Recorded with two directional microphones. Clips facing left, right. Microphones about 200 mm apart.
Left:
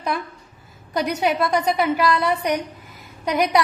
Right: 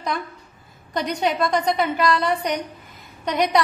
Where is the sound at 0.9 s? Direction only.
10° left (ahead or behind).